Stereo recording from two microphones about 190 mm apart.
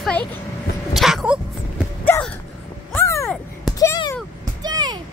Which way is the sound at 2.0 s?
10° left (ahead or behind).